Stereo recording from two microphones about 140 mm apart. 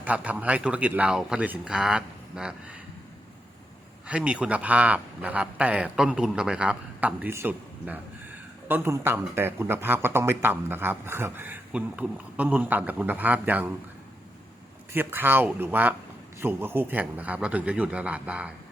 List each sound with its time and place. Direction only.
0.0 s speech: 10° right (ahead or behind)
4.0 s speech: 10° right (ahead or behind)
14.9 s speech: 15° right (ahead or behind)